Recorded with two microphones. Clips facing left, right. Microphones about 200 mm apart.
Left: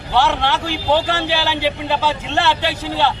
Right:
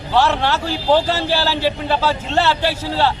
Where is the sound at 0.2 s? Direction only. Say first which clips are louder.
Right 1 dB; 15° left (ahead or behind).